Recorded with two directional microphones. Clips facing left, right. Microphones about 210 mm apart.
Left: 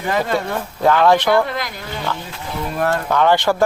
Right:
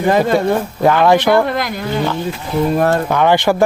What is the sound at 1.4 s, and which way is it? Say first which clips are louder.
Speech: right 4 dB; 55° right (ahead or behind).